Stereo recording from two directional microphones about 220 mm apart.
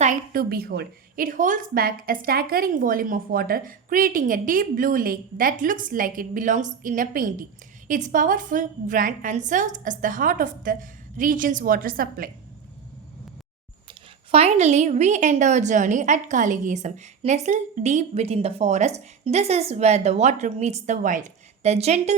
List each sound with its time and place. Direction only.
0.0 s a woman's voice: 40° right (ahead or behind)
14.3 s a woman's voice: 30° right (ahead or behind)